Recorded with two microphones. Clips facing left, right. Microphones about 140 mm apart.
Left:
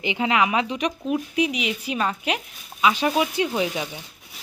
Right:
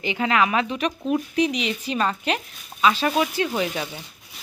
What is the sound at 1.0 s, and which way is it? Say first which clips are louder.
A woman's voice: right 2 dB; 5° left (ahead or behind).